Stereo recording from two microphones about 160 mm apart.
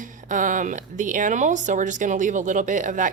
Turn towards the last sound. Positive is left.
turn(degrees=-50)  # may be behind; listen again after turning